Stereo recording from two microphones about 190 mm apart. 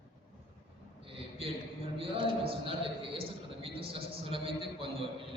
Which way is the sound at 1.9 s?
30° right (ahead or behind).